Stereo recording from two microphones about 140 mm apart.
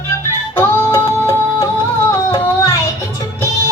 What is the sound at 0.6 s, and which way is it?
Music, 15° left (ahead or behind).